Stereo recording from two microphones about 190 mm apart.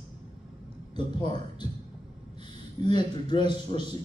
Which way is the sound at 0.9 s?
20° left (ahead or behind).